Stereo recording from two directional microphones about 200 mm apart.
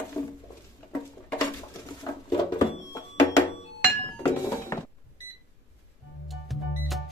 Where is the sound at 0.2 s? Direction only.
15° left (ahead or behind).